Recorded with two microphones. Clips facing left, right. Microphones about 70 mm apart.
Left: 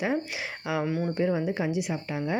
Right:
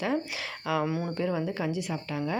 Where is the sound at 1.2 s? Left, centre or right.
Centre.